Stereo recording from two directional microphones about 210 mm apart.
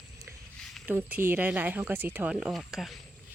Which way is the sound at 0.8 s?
10° right (ahead or behind).